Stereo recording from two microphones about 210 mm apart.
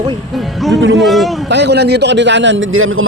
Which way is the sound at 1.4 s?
55° right (ahead or behind).